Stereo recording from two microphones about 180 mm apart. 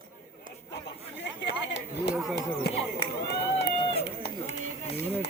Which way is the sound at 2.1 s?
Centre (ahead or behind).